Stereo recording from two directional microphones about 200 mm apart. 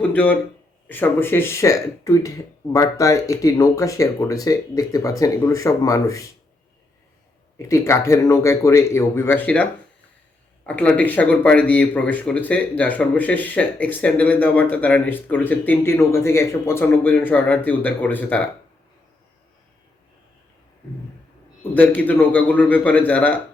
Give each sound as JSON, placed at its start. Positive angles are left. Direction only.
{"t": 0.0, "sound": "speech", "side_deg": 10}
{"t": 7.6, "sound": "speech", "side_deg": 15}
{"t": 10.7, "sound": "speech", "side_deg": 5}
{"t": 21.8, "sound": "speech", "side_deg": 10}